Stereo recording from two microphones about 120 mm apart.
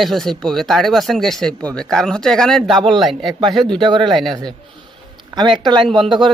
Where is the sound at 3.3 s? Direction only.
40° right (ahead or behind).